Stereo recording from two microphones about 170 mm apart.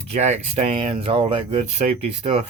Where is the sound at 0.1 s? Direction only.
40° right (ahead or behind).